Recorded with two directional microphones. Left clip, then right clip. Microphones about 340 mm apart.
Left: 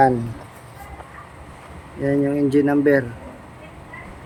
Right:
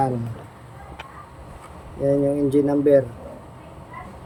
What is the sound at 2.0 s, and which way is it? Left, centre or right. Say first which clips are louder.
Speech: even; left.